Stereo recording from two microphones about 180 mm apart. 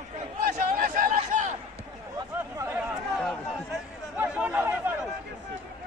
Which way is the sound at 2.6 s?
15° right (ahead or behind).